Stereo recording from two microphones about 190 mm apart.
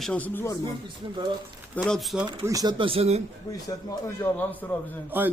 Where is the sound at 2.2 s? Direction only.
20° right (ahead or behind).